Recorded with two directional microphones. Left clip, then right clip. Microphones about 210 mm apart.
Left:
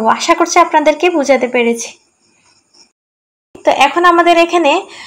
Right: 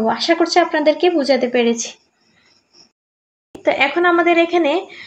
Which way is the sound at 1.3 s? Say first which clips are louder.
Left 3 dB; 90° left.